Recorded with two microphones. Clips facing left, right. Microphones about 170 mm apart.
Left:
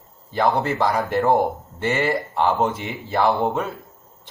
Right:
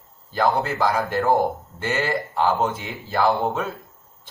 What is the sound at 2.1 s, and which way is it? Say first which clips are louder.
Speech: left 1 dB; centre (ahead or behind).